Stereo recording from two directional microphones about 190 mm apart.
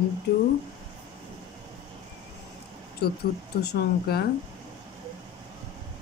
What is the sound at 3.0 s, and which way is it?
Speech, 55° left (ahead or behind).